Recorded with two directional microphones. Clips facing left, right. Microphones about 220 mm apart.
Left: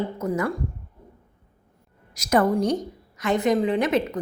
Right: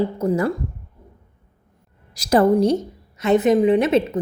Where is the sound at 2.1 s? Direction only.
30° right (ahead or behind).